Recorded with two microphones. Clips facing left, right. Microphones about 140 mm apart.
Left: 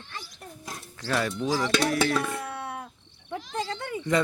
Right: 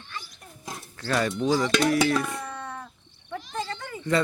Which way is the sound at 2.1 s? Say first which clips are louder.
Right 1 dB; centre (ahead or behind).